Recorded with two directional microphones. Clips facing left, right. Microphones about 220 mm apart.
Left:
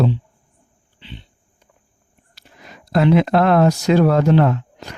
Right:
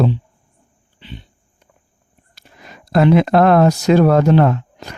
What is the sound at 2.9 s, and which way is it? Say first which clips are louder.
Speech: right 2 dB; 50° right (ahead or behind).